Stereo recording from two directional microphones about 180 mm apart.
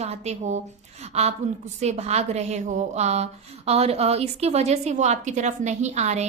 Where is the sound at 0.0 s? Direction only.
40° right (ahead or behind).